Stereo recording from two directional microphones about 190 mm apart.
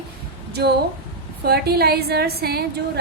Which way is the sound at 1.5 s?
55° right (ahead or behind).